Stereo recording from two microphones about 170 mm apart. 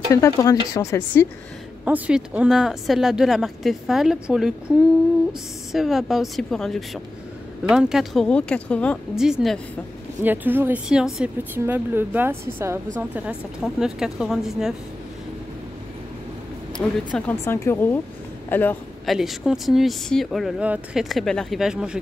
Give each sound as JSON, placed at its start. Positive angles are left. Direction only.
{"t": 0.1, "sound": "speech", "side_deg": 20}
{"t": 1.9, "sound": "speech", "side_deg": -10}
{"t": 9.1, "sound": "a woman's voice", "side_deg": -5}
{"t": 16.7, "sound": "speech", "side_deg": 5}
{"t": 19.0, "sound": "speech", "side_deg": 0}